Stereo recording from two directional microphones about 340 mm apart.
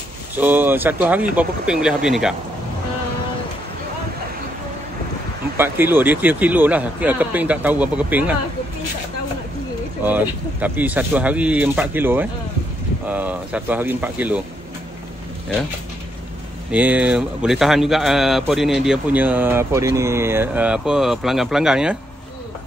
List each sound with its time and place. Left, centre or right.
0.4 s speech: centre
5.6 s speech: centre
10.0 s speech: centre
16.7 s speech: centre